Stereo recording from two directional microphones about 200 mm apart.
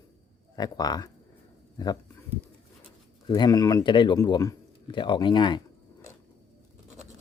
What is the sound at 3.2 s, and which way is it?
Speech, 20° left (ahead or behind).